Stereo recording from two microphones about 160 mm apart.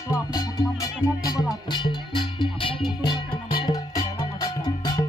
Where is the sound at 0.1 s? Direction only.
20° left (ahead or behind).